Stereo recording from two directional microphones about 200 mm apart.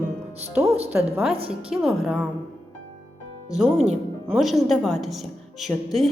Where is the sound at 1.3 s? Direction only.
30° right (ahead or behind).